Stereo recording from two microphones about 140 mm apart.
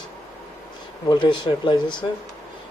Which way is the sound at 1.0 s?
35° left (ahead or behind).